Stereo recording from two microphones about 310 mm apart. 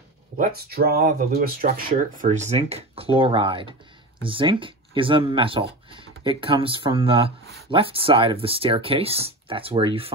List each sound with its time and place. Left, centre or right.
0.4 s speech: right